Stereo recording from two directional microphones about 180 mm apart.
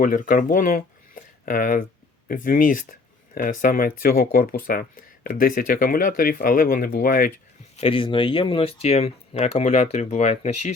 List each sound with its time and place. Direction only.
0.0 s speech: 50° left (ahead or behind)
7.8 s speech: 30° left (ahead or behind)